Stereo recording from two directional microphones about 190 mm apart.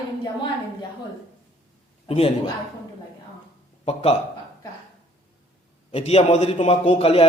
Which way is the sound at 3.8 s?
30° left (ahead or behind).